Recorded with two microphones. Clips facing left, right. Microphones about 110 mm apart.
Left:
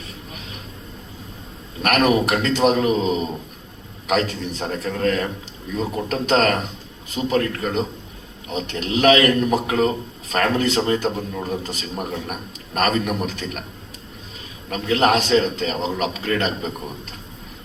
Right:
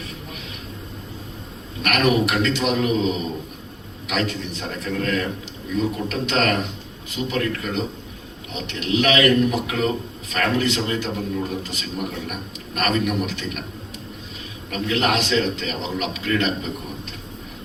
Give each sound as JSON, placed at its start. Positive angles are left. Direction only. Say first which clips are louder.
{"t": 1.8, "sound": "a man's voice", "louder": "left 2 dB", "side_deg": 35}
{"t": 14.7, "sound": "a man's voice", "louder": "left 4 dB", "side_deg": 35}